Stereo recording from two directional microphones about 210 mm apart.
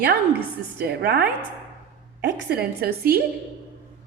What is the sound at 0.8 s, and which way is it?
A woman's voice, 50° right (ahead or behind).